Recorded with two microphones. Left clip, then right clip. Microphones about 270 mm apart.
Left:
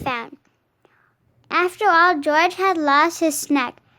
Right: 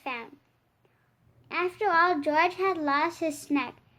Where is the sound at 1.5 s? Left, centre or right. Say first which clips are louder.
Left 10 dB; left.